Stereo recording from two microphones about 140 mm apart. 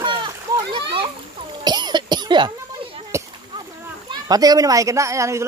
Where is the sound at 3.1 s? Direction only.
20° right (ahead or behind).